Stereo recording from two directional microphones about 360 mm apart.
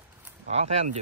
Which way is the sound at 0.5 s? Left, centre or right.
Centre.